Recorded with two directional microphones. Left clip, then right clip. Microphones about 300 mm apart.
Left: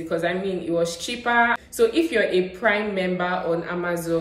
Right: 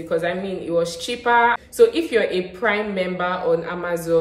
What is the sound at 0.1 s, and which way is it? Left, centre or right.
A woman's voice, centre.